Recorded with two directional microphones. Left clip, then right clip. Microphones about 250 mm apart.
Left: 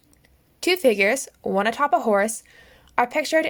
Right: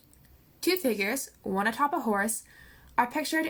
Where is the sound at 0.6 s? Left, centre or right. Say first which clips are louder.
Left 9 dB; left.